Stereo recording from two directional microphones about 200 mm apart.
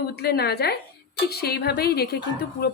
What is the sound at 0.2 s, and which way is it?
Speech, 55° left (ahead or behind).